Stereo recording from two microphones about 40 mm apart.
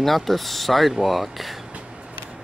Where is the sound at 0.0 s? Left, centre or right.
Centre.